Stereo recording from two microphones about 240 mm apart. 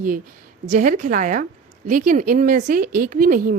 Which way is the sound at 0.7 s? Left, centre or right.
Right.